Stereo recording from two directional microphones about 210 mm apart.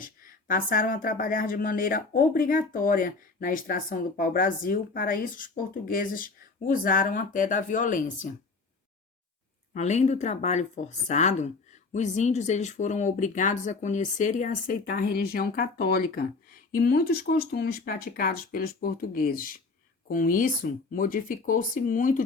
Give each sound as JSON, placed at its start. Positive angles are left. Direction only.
{"t": 0.0, "sound": "speech", "side_deg": 40}
{"t": 9.7, "sound": "speech", "side_deg": 35}